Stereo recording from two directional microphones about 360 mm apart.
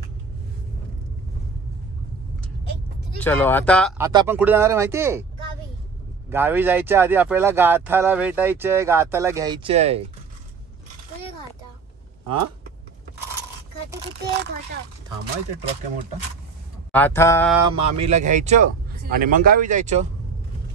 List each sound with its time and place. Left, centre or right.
3.2 s speech: centre
4.0 s speech: centre
6.3 s speech: centre
12.3 s speech: right
14.3 s speech: right
16.9 s speech: centre
17.6 s speech: centre